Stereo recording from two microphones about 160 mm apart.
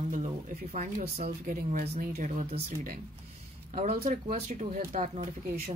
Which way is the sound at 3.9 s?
65° right (ahead or behind).